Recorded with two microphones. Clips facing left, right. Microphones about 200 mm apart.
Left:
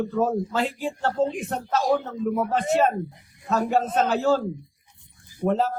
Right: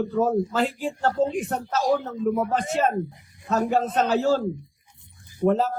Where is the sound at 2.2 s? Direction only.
45° right (ahead or behind).